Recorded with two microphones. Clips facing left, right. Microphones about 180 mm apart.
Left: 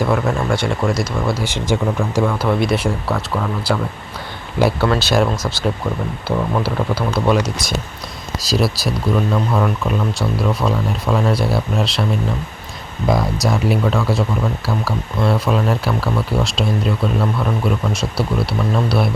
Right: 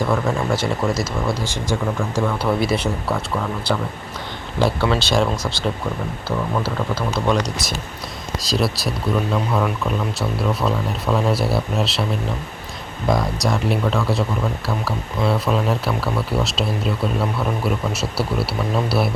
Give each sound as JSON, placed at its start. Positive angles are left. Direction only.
{"t": 0.1, "sound": "speech", "side_deg": 0}
{"t": 1.5, "sound": "speech", "side_deg": 20}
{"t": 2.4, "sound": "speech", "side_deg": -5}
{"t": 4.9, "sound": "speech", "side_deg": 5}
{"t": 7.1, "sound": "speech", "side_deg": 10}
{"t": 13.1, "sound": "speech", "side_deg": 0}